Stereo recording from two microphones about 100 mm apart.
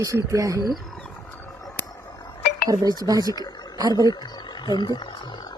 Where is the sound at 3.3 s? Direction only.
40° left (ahead or behind).